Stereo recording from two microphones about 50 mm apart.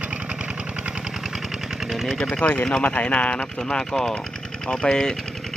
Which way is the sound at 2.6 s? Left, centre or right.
Centre.